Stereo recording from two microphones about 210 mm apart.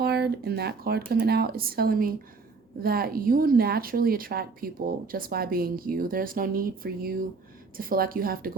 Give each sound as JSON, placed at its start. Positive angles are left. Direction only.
{"t": 0.0, "sound": "a woman's voice", "side_deg": -50}